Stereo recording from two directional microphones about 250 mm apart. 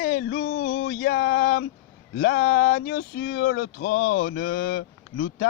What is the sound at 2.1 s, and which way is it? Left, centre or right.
Speech, left.